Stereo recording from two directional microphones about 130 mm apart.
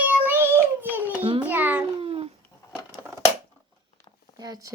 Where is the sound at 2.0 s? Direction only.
50° right (ahead or behind).